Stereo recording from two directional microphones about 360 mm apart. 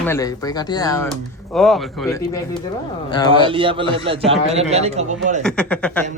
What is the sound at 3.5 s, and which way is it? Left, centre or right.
A man's voice, centre.